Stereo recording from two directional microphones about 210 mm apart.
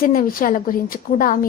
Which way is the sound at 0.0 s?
40° left (ahead or behind).